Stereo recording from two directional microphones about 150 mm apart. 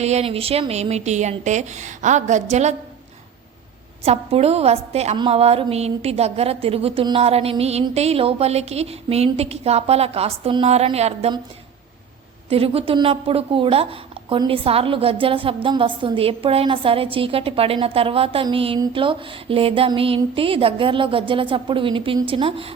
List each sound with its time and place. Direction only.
0.0 s speech: 45° right (ahead or behind)
4.0 s speech: 40° right (ahead or behind)
12.5 s speech: 40° right (ahead or behind)